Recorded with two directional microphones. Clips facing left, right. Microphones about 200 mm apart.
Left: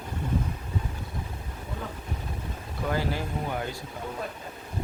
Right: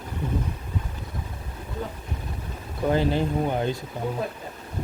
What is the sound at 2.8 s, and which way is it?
Speech, 25° right (ahead or behind).